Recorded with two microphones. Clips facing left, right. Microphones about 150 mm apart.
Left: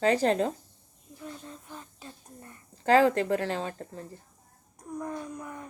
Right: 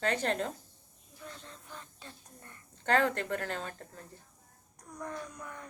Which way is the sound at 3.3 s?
35° left (ahead or behind).